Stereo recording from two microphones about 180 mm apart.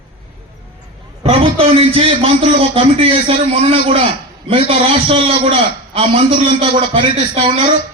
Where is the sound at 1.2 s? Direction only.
30° right (ahead or behind).